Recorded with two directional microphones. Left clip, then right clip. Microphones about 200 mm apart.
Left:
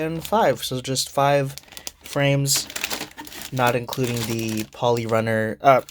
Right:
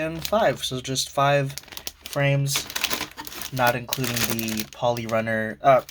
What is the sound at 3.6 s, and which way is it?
Speech, 50° left (ahead or behind).